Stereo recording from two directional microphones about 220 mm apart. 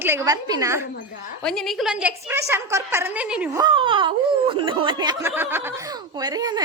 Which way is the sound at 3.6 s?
20° right (ahead or behind).